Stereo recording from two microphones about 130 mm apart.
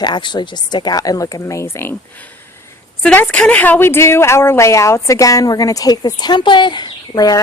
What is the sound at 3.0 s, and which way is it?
A woman's voice, 5° left (ahead or behind).